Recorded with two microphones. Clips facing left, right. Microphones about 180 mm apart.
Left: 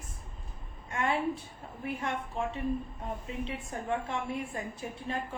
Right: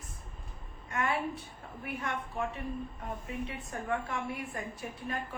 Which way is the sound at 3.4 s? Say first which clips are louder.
Left 2 dB; 25° left (ahead or behind).